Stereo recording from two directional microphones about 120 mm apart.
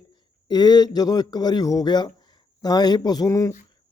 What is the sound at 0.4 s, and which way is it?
A man's voice, 35° left (ahead or behind).